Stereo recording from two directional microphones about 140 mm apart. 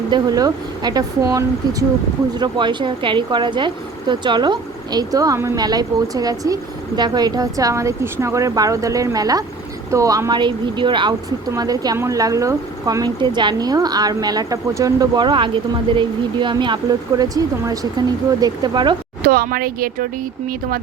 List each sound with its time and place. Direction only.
0.1 s speech: 25° right (ahead or behind)
19.2 s speech: 90° right